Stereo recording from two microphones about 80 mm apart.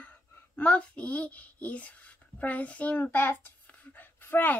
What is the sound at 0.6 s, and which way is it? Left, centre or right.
A child's voice, centre.